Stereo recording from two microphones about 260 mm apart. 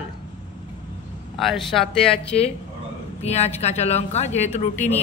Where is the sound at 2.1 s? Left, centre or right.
Left.